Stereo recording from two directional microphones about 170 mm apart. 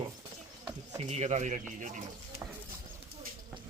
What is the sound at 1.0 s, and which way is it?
Speech, 40° right (ahead or behind).